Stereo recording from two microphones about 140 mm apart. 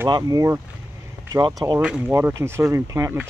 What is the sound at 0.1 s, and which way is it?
Speech, 25° right (ahead or behind).